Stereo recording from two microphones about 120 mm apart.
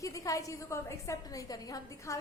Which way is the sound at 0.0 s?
25° left (ahead or behind).